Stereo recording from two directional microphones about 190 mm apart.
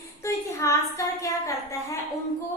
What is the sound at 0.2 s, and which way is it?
A woman's voice, 15° left (ahead or behind).